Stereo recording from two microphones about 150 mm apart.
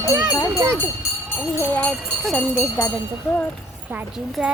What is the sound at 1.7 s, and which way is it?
Speech, 5° left (ahead or behind).